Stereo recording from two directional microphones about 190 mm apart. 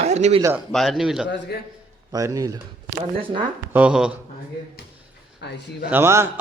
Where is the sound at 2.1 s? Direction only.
20° right (ahead or behind).